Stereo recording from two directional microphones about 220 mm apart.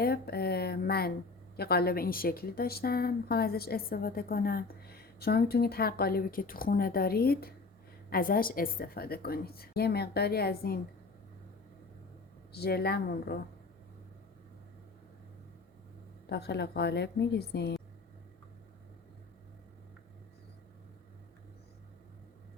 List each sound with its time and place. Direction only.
0.0 s a woman's voice: 45° left (ahead or behind)
12.5 s a woman's voice: 45° left (ahead or behind)
16.3 s a woman's voice: 50° left (ahead or behind)